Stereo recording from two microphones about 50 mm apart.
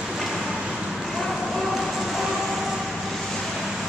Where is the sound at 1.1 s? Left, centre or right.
Centre.